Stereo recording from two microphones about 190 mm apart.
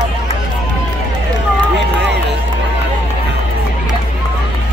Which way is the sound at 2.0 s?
65° right (ahead or behind).